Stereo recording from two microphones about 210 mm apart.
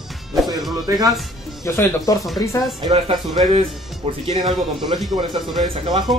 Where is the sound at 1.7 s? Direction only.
10° left (ahead or behind).